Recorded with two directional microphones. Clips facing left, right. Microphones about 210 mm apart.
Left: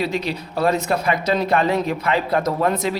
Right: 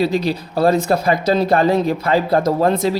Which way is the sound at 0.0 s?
35° right (ahead or behind).